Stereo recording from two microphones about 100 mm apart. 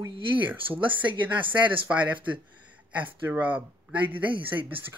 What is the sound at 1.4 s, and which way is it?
Speech, 60° right (ahead or behind).